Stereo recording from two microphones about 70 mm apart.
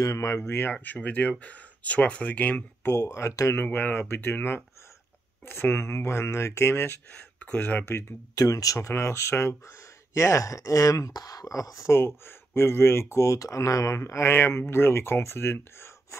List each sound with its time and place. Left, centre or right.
0.0 s speech: left
0.8 s speech: left
2.9 s speech: left
3.5 s speech: left
7.3 s speech: centre
8.4 s speech: left
12.3 s speech: left